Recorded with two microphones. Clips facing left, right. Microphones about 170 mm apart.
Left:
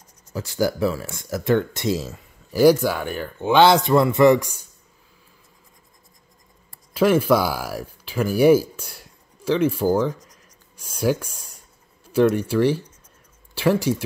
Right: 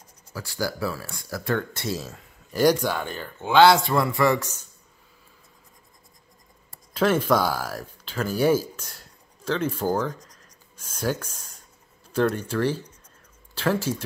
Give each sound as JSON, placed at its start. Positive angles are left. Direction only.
{"t": 0.3, "sound": "speech", "side_deg": 20}
{"t": 6.9, "sound": "speech", "side_deg": 10}